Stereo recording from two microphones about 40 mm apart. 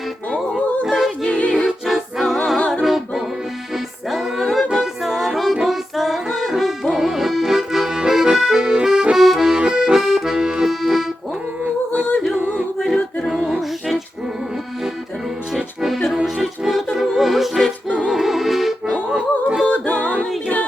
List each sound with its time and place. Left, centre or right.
0.9 s music: centre
1.3 s music: left
1.5 s music: centre
6.9 s accordion: centre
9.1 s accordion: centre
13.6 s music: centre
15.5 s music: centre
19.1 s yodeling: right
19.6 s yodeling: left